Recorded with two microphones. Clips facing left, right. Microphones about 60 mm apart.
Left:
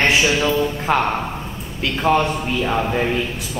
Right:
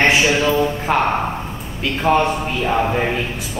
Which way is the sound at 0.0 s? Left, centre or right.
Centre.